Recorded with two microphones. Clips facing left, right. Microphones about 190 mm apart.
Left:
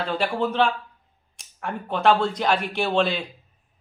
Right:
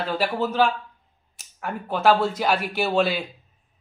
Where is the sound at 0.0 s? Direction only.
5° right (ahead or behind).